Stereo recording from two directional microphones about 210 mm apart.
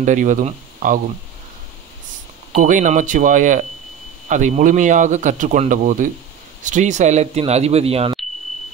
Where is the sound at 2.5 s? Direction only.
35° right (ahead or behind).